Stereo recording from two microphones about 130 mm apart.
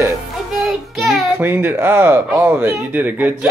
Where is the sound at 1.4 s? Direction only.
15° right (ahead or behind).